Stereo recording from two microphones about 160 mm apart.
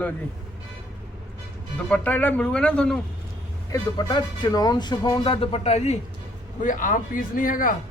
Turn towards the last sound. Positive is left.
turn(degrees=60)  # may be behind; listen again after turning